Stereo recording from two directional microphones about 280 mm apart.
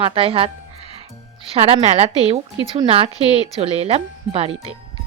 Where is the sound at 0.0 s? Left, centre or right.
Centre.